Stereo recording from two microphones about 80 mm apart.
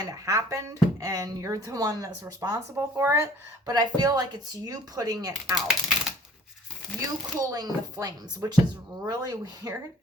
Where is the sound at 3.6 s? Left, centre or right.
Right.